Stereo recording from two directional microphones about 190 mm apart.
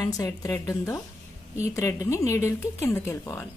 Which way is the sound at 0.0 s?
20° left (ahead or behind).